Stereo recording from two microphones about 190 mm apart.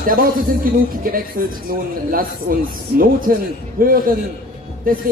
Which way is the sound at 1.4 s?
50° right (ahead or behind).